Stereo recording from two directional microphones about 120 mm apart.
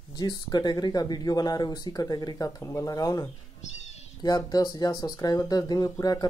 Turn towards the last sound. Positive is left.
turn(degrees=30)  # may be behind; listen again after turning